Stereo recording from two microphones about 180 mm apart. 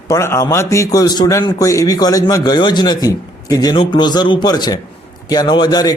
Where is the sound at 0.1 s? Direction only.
15° left (ahead or behind).